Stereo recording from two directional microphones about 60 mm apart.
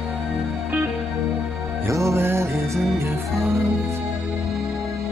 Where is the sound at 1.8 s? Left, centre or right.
Right.